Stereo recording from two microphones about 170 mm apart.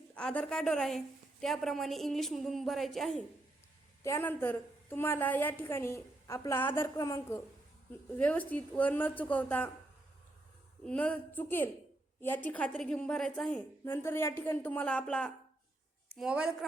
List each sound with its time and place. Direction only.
0.1 s a woman's voice: 5° left (ahead or behind)
4.0 s a woman's voice: 15° left (ahead or behind)
10.8 s a woman's voice: 10° left (ahead or behind)
13.8 s a woman's voice: 15° left (ahead or behind); by 16.6 s 5° right (ahead or behind)